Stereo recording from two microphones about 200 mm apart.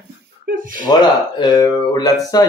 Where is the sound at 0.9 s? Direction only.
20° left (ahead or behind).